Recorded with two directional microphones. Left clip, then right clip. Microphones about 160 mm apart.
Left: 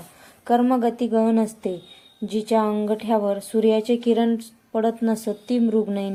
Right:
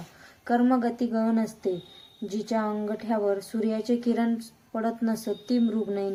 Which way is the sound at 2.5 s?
20° left (ahead or behind).